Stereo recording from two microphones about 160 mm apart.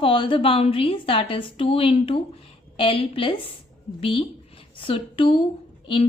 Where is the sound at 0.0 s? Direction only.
35° left (ahead or behind).